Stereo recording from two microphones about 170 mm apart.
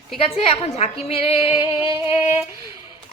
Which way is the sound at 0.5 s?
35° left (ahead or behind).